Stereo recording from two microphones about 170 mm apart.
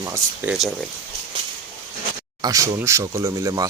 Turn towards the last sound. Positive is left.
turn(degrees=-20)  # may be behind; listen again after turning